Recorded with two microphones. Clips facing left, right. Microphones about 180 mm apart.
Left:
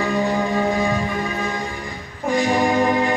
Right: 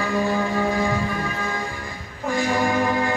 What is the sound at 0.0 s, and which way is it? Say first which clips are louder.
Music: left 2 dB; 20° left (ahead or behind).